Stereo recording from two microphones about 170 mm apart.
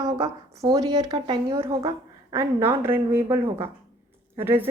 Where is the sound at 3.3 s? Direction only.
35° right (ahead or behind).